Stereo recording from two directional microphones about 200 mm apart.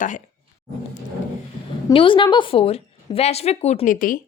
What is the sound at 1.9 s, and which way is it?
A woman's voice, 25° left (ahead or behind).